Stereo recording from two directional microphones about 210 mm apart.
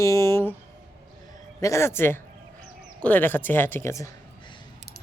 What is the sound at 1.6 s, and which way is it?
Speech, 15° left (ahead or behind).